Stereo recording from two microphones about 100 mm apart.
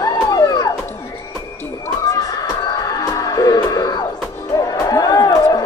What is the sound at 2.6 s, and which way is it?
Music, 40° left (ahead or behind).